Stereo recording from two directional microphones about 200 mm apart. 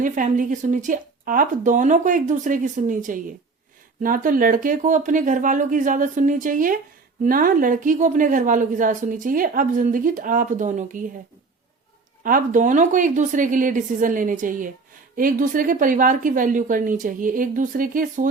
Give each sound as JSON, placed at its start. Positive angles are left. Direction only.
{"t": 0.0, "sound": "a woman's voice", "side_deg": -40}
{"t": 12.2, "sound": "a woman's voice", "side_deg": -40}